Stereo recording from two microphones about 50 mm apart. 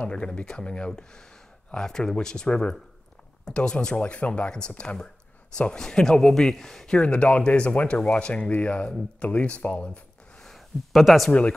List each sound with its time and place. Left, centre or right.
0.0 s speech: left
6.9 s speech: centre
10.9 s speech: centre